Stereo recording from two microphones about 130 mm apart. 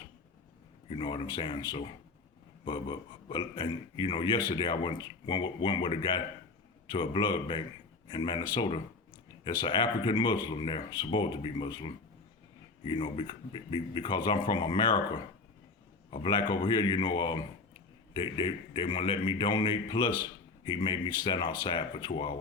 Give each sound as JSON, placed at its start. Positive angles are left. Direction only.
{"t": 0.9, "sound": "a man's voice", "side_deg": 40}
{"t": 16.2, "sound": "a man's voice", "side_deg": 35}